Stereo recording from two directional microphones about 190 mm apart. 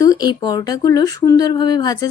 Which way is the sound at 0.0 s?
20° left (ahead or behind).